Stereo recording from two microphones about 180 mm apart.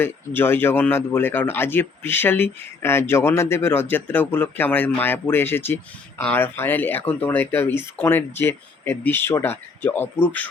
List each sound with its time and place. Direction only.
0.0 s speech: 10° left (ahead or behind)